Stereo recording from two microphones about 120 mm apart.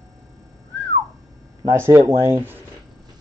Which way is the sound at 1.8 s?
20° right (ahead or behind).